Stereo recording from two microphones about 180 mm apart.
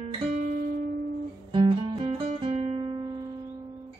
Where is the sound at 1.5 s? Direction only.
25° right (ahead or behind).